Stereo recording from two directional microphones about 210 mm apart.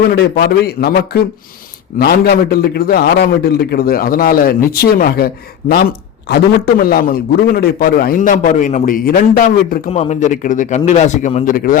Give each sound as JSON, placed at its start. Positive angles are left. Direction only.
{"t": 0.2, "sound": "a man's voice", "side_deg": 50}
{"t": 9.9, "sound": "speech", "side_deg": 30}